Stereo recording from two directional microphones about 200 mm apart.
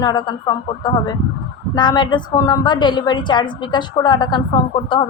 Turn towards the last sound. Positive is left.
turn(degrees=25)  # may be behind; listen again after turning